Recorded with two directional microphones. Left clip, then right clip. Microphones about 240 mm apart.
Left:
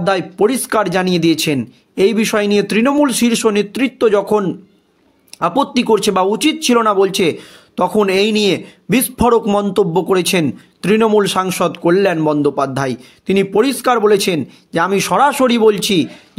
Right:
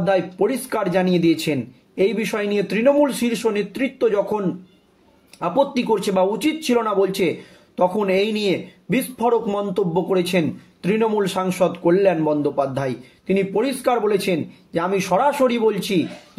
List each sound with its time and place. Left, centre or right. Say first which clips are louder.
0.0 s speech: left 4 dB; left